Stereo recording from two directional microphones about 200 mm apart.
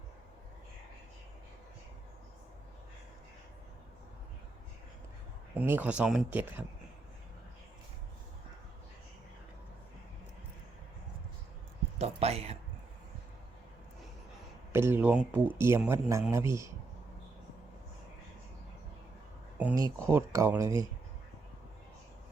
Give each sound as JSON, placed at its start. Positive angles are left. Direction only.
{"t": 5.5, "sound": "a man's voice", "side_deg": -10}
{"t": 11.9, "sound": "a sound", "side_deg": -30}
{"t": 14.7, "sound": "a man's voice", "side_deg": -10}
{"t": 19.5, "sound": "a man's voice", "side_deg": -10}